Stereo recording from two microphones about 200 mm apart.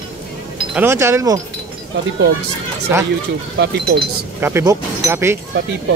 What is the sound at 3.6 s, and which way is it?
Speech, 55° right (ahead or behind).